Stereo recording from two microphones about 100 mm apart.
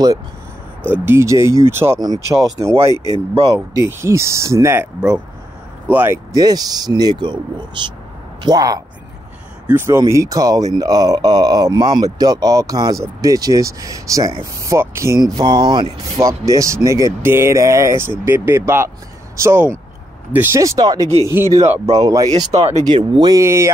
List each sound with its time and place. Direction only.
0.8 s speech: 20° right (ahead or behind)
2.9 s speech: 45° left (ahead or behind)
3.3 s speech: 50° right (ahead or behind)
3.8 s speech: 30° right (ahead or behind)
5.9 s speech: 20° right (ahead or behind)
6.3 s speech: 40° right (ahead or behind)
8.4 s speech: 40° right (ahead or behind)
9.7 s speech: 25° right (ahead or behind)
15.1 s speech: 40° right (ahead or behind)
16.2 s speech: 35° right (ahead or behind)
21.3 s speech: 25° right (ahead or behind)
21.9 s speech: 40° right (ahead or behind)
23.4 s speech: 25° right (ahead or behind)